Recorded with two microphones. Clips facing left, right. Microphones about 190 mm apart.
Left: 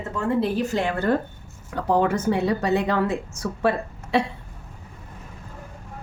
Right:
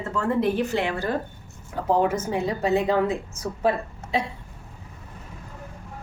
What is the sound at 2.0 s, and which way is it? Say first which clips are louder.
A woman's voice: left 2 dB; 70° left (ahead or behind).